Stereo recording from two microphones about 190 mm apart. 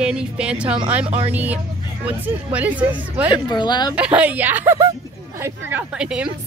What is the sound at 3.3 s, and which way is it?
Speech, 25° left (ahead or behind).